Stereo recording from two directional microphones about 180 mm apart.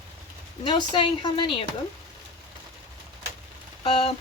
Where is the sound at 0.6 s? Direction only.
25° left (ahead or behind).